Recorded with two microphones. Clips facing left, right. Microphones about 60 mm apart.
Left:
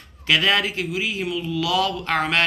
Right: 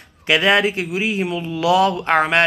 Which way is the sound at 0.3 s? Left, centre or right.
Right.